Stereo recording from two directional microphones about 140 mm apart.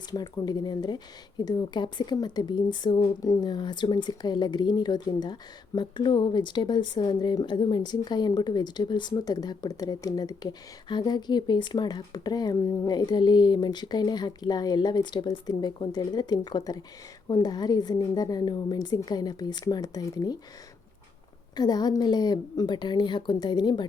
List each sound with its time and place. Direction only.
0.1 s a woman's voice: 30° left (ahead or behind)
21.5 s speech: 30° left (ahead or behind)